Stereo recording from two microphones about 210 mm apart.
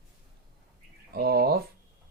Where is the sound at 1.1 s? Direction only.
45° right (ahead or behind).